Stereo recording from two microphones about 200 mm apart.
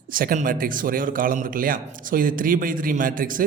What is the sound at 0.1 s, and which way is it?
Speech, 45° right (ahead or behind).